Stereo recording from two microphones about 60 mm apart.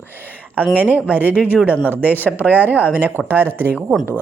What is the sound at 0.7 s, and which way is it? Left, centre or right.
Speech, right.